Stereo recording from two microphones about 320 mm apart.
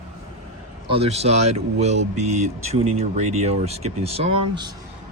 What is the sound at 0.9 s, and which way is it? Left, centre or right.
Speech, centre.